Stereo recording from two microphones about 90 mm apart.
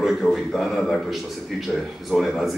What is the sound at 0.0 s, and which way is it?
Speech, centre (ahead or behind).